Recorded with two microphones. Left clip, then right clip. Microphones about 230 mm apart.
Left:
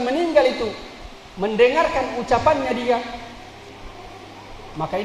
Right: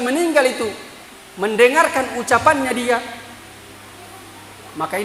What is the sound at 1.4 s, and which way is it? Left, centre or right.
A man's voice, right.